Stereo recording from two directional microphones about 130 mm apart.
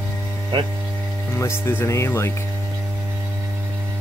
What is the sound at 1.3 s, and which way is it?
Speech, 20° left (ahead or behind).